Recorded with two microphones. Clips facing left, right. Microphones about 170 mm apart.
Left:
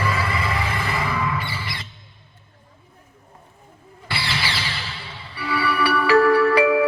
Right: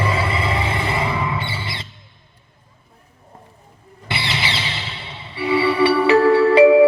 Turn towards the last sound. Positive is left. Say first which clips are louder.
# right 7 dB
turn(degrees=-25)  # may be behind; listen again after turning